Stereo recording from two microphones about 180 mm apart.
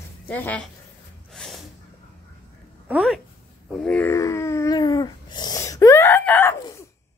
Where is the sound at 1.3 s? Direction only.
5° left (ahead or behind).